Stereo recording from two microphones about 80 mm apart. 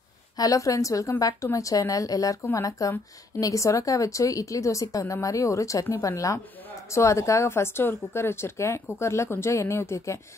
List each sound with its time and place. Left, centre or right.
0.4 s a woman's voice: left